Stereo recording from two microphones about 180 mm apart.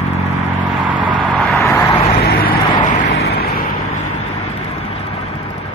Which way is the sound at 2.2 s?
55° left (ahead or behind).